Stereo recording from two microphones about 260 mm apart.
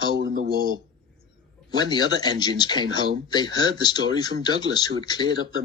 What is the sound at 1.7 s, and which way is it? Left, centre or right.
Speech, centre.